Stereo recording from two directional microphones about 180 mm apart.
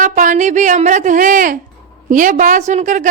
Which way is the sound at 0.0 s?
45° right (ahead or behind).